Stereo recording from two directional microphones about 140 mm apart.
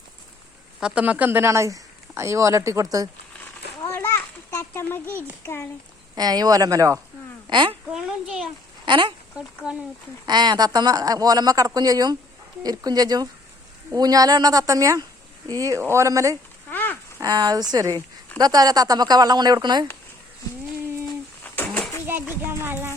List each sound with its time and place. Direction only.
0.8 s speech: 5° right (ahead or behind); by 3.1 s 25° right (ahead or behind)
3.3 s children playing: 15° left (ahead or behind)
4.7 s speech: 15° left (ahead or behind)
6.1 s speech: 30° right (ahead or behind)
7.5 s speech: 35° right (ahead or behind)
7.9 s a child's voice: 5° right (ahead or behind)
8.9 s speech: 35° right (ahead or behind)
9.6 s speech: 5° right (ahead or behind)
10.2 s speech: 30° right (ahead or behind)
16.6 s a sound: 15° left (ahead or behind)
17.2 s speech: 30° right (ahead or behind)
21.4 s a sound: 10° left (ahead or behind)
22.0 s music: 15° right (ahead or behind)